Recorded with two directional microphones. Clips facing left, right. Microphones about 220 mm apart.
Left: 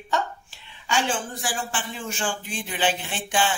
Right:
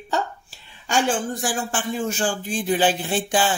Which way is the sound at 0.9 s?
45° right (ahead or behind).